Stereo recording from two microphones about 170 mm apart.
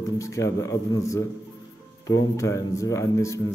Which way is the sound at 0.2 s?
20° left (ahead or behind).